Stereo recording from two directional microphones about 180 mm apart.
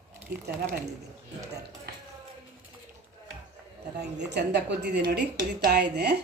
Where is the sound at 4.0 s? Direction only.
70° right (ahead or behind).